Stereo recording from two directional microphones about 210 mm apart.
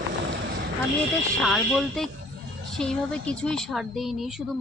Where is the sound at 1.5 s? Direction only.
Centre (ahead or behind).